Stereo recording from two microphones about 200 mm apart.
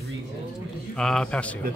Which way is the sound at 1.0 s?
5° left (ahead or behind).